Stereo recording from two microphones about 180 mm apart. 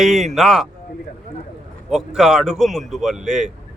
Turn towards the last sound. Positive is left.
turn(degrees=0)  # may be behind; listen again after turning